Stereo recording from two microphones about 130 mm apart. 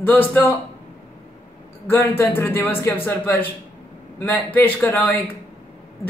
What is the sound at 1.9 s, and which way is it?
A man's voice, 15° left (ahead or behind).